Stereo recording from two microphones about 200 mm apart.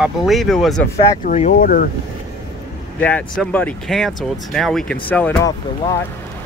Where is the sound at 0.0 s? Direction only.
Centre (ahead or behind).